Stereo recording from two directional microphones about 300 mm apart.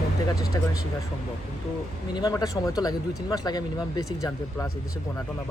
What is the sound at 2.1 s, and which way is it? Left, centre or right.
Speech, centre.